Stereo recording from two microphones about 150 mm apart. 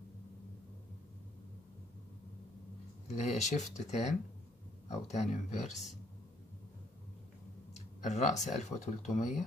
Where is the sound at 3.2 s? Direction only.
50° left (ahead or behind).